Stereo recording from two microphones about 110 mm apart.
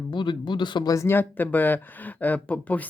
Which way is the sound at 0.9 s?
25° left (ahead or behind).